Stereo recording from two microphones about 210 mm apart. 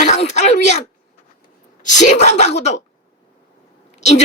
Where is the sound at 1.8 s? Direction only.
35° left (ahead or behind).